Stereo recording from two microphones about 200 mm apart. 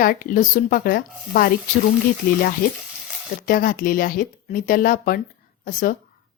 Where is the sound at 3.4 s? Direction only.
45° left (ahead or behind).